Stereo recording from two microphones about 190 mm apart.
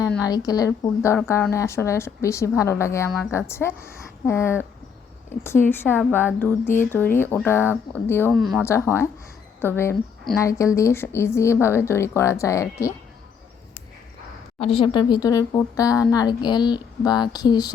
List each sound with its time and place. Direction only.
0.2 s a woman's voice: 20° left (ahead or behind)
8.3 s speech: centre (ahead or behind)
8.6 s a woman's voice: 15° left (ahead or behind)
14.6 s speech: 30° left (ahead or behind)